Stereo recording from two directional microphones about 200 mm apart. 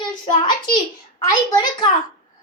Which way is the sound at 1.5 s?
20° left (ahead or behind).